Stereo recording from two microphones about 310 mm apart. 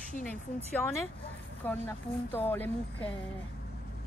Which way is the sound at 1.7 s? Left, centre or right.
Centre.